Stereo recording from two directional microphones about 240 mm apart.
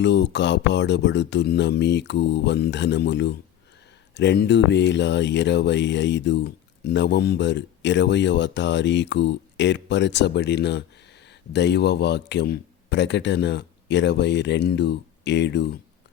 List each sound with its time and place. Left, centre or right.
0.0 s speech: left